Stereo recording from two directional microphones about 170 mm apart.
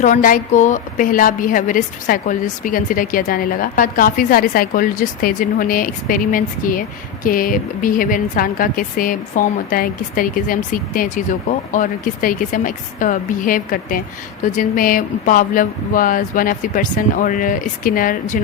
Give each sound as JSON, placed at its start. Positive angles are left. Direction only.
{"t": 0.0, "sound": "a woman's voice", "side_deg": 50}